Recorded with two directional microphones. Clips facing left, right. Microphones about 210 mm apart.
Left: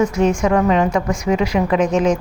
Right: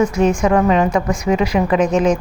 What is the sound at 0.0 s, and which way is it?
A woman's voice, 5° right (ahead or behind).